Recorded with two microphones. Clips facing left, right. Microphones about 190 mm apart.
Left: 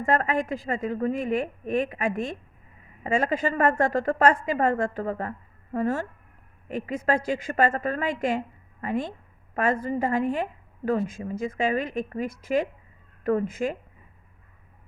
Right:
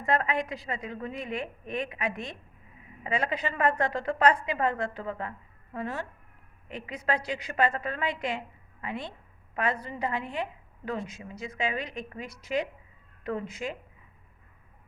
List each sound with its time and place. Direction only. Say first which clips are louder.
0.0 s a woman's voice: left 4 dB; 45° left (ahead or behind)